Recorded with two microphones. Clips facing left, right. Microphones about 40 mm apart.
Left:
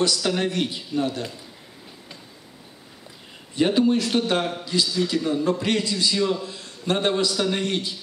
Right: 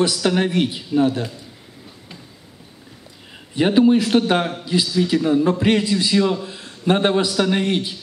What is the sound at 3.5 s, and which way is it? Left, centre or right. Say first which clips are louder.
A man's voice: right 5 dB; right.